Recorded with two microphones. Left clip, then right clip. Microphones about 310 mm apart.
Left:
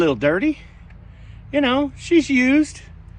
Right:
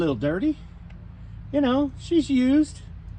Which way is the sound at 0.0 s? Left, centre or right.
Centre.